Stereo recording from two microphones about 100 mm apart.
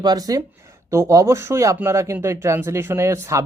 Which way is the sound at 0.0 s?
40° right (ahead or behind).